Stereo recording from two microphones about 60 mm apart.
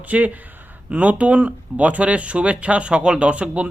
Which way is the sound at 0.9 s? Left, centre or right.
Right.